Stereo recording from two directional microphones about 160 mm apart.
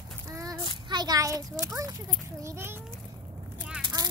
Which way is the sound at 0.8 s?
25° right (ahead or behind).